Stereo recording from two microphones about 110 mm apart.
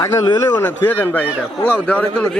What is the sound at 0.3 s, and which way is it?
Speech, 40° left (ahead or behind).